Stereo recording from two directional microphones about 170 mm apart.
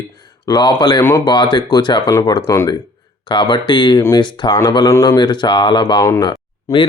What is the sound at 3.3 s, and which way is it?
Speech, 25° left (ahead or behind).